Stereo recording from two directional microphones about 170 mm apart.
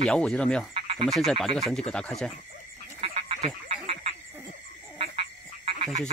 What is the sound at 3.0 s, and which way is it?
Duck, 35° right (ahead or behind).